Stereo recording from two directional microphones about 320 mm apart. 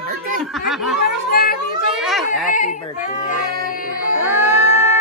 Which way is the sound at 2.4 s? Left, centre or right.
Left.